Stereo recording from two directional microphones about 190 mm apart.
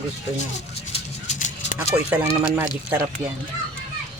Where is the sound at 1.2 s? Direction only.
40° left (ahead or behind).